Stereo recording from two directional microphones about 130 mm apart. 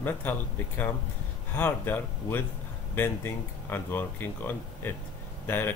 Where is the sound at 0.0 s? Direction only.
15° left (ahead or behind).